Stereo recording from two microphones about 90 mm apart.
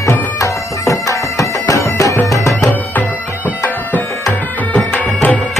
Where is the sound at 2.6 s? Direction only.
20° left (ahead or behind).